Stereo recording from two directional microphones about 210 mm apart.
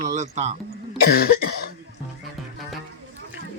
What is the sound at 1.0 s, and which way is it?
Cough, 45° left (ahead or behind).